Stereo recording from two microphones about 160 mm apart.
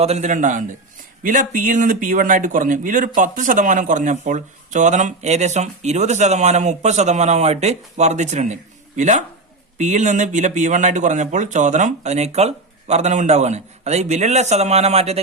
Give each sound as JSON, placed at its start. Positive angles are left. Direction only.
{"t": 0.0, "sound": "a man's voice", "side_deg": -45}